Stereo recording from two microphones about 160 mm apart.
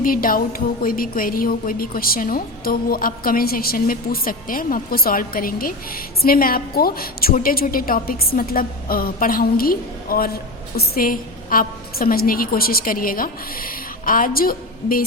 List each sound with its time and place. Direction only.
0.0 s a woman's voice: 65° left (ahead or behind)